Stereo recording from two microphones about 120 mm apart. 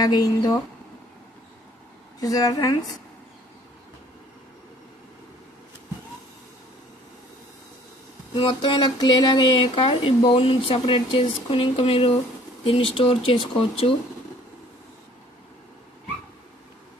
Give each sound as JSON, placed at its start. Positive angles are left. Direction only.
{"t": 0.0, "sound": "speech", "side_deg": 35}
{"t": 2.1, "sound": "speech", "side_deg": 30}
{"t": 8.4, "sound": "speech", "side_deg": 40}